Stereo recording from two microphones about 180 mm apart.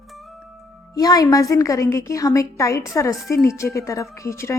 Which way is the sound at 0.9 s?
20° left (ahead or behind).